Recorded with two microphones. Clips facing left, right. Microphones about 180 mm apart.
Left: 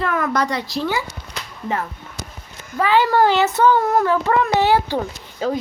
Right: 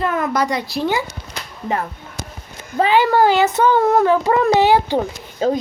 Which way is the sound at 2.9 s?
15° right (ahead or behind).